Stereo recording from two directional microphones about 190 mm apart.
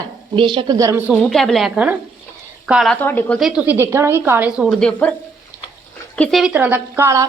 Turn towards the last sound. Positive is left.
turn(degrees=-15)  # may be behind; listen again after turning